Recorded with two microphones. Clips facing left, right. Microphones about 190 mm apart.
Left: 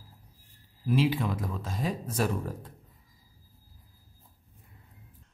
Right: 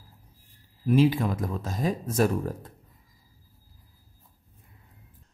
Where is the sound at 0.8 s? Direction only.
45° right (ahead or behind).